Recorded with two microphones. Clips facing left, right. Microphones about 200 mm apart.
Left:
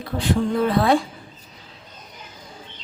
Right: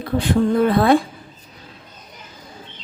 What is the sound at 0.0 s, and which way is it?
Speech, 55° right (ahead or behind).